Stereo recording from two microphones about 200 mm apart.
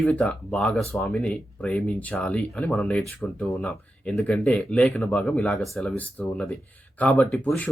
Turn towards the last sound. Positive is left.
turn(degrees=10)  # may be behind; listen again after turning